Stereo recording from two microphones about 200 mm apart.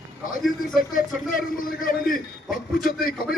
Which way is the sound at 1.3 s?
45° left (ahead or behind).